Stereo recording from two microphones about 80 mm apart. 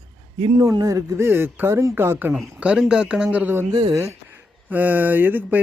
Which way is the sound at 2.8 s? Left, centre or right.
Centre.